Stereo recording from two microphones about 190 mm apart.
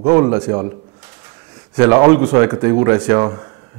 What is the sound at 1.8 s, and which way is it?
A man's voice, 15° right (ahead or behind).